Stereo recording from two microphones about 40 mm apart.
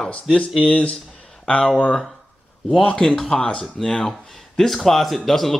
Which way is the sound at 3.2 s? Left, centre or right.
Left.